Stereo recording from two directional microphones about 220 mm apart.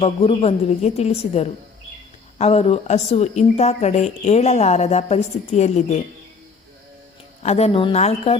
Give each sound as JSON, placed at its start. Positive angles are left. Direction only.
{"t": 0.0, "sound": "a woman's voice", "side_deg": 25}
{"t": 7.4, "sound": "a woman's voice", "side_deg": 30}